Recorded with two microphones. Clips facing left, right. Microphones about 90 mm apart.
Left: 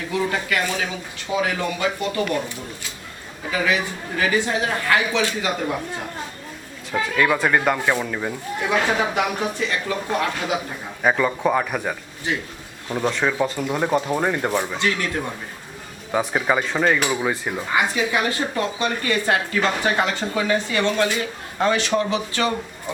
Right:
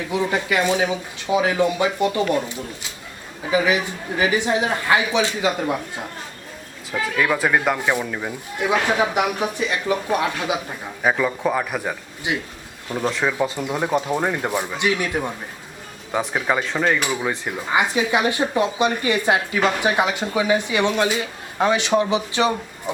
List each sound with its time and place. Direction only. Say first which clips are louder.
0.1 s speech: right 1 dB; 20° right (ahead or behind)
3.5 s speech: right 3 dB; 20° right (ahead or behind)
7.2 s speech: even; 5° right (ahead or behind)
11.0 s speech: left 1 dB; centre (ahead or behind)
12.3 s speech: right 1 dB; 15° right (ahead or behind)
12.9 s speech: even; centre (ahead or behind)
14.8 s speech: right 2 dB; 15° right (ahead or behind)
16.1 s speech: left 1 dB; centre (ahead or behind)
17.7 s speech: right 2 dB; 20° right (ahead or behind)